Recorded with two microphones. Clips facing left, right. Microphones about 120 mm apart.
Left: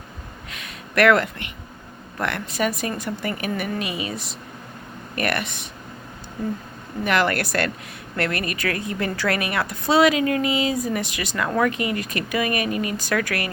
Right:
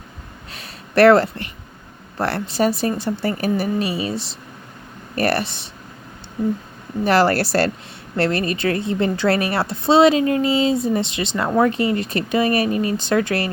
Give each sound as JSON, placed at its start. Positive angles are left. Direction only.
{"t": 0.5, "sound": "a sound", "side_deg": -35}
{"t": 2.1, "sound": "speech", "side_deg": -30}
{"t": 7.0, "sound": "a woman's voice", "side_deg": -35}